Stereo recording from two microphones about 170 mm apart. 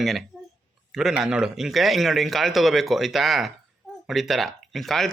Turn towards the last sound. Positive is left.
turn(degrees=0)  # may be behind; listen again after turning